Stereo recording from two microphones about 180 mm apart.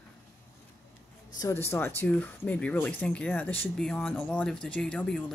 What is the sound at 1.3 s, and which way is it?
Speech, 15° left (ahead or behind).